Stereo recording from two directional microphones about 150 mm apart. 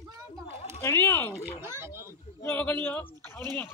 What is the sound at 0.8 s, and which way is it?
Speech, 20° left (ahead or behind).